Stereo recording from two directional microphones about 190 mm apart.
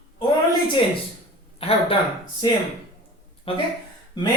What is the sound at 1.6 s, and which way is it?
Speech, 30° left (ahead or behind).